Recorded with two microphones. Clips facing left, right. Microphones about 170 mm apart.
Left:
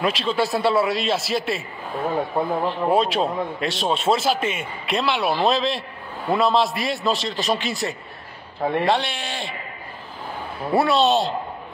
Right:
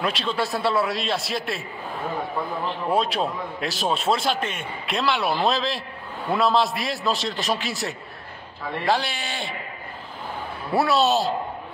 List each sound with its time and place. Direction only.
0.0 s a man's voice: centre (ahead or behind)
2.9 s a man's voice: centre (ahead or behind)
8.5 s a man's voice: 55° left (ahead or behind)
8.8 s a man's voice: centre (ahead or behind)
10.7 s a man's voice: centre (ahead or behind)